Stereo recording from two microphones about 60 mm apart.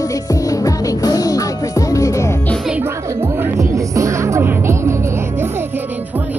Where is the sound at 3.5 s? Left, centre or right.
Right.